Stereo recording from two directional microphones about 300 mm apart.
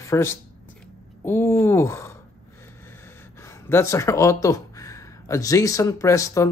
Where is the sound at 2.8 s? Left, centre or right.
Centre.